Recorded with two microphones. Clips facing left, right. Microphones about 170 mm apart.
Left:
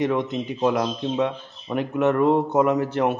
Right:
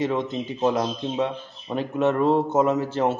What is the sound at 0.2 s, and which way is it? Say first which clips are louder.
Speech: left 1 dB; 15° left (ahead or behind).